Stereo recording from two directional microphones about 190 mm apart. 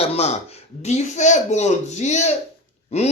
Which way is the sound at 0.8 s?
35° left (ahead or behind).